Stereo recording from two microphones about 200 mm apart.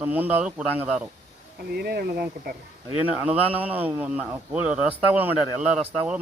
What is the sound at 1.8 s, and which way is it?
Speech, 50° right (ahead or behind).